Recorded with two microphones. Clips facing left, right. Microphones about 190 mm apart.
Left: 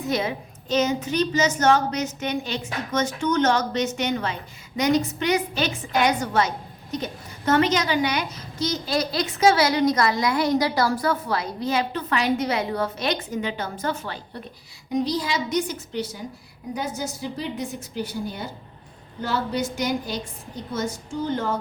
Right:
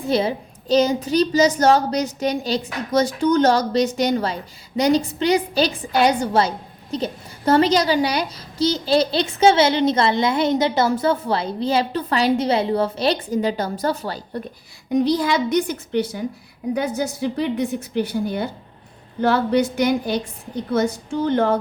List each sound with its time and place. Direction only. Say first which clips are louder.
0.1 s a child's voice: right 6 dB; 30° right (ahead or behind)
14.8 s a woman's voice: right 6 dB; 60° right (ahead or behind)